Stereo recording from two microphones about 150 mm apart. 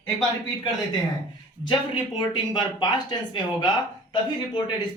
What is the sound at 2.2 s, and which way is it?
A man's voice, 30° left (ahead or behind).